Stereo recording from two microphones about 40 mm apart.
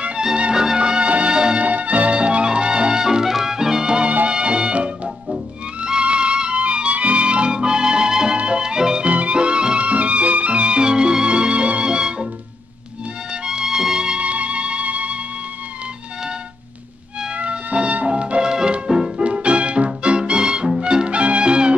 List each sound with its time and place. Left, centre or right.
0.4 s music: centre
1.6 s music: right; by 9.0 s centre
9.0 s music: right
13.3 s music: centre
14.2 s music: right
17.4 s music: right
18.9 s music: centre
19.2 s music: right